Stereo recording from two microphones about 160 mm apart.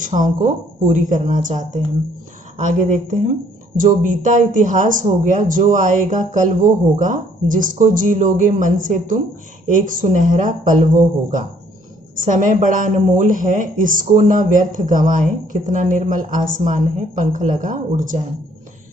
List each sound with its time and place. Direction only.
0.0 s a woman's voice: 55° right (ahead or behind)